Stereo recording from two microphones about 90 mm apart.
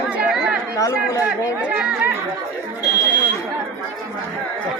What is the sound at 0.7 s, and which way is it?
Speech, 40° left (ahead or behind).